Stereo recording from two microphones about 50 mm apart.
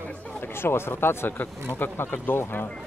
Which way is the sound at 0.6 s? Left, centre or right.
Left.